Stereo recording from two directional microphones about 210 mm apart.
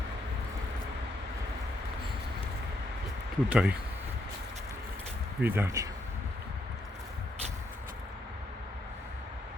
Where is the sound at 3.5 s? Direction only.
5° right (ahead or behind).